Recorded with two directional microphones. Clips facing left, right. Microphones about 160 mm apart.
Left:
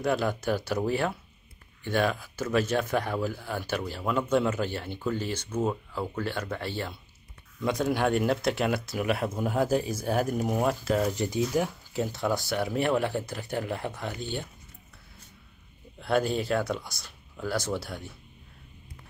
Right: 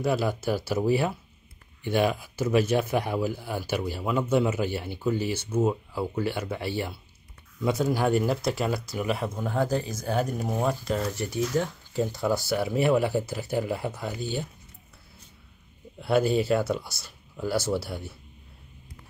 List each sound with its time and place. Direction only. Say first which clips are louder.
0.0 s speech: right 1 dB; 5° right (ahead or behind)
11.1 s speech: left 1 dB; 15° left (ahead or behind)
11.5 s speech: right 1 dB; 5° left (ahead or behind)
16.0 s speech: right 3 dB; 5° right (ahead or behind)